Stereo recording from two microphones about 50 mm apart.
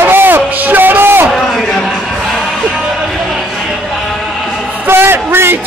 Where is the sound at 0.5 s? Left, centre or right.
Right.